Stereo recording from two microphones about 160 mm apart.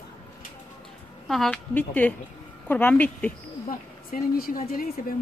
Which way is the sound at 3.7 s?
65° left (ahead or behind).